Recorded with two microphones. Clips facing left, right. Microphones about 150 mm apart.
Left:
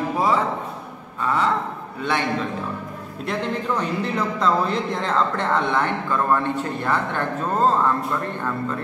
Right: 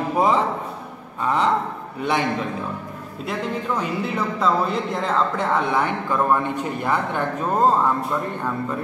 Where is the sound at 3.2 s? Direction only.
5° right (ahead or behind).